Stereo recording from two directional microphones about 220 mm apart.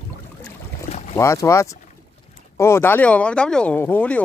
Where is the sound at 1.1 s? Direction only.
15° left (ahead or behind).